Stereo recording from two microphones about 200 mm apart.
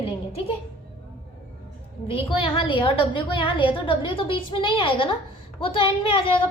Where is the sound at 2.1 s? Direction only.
25° left (ahead or behind).